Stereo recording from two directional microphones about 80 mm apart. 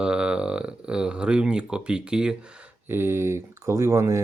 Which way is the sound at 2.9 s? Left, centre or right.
Right.